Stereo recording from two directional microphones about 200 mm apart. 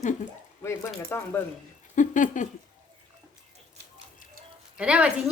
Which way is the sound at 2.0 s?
40° left (ahead or behind).